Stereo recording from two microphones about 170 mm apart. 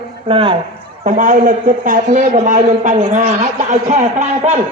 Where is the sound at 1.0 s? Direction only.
50° right (ahead or behind).